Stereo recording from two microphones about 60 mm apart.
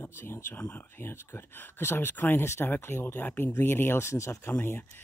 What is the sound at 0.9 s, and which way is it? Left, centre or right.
Speech, left.